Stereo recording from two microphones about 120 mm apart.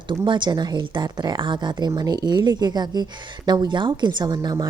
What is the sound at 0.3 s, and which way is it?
A woman's voice, 40° right (ahead or behind).